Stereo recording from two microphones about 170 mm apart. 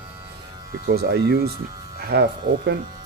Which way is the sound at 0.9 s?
70° right (ahead or behind).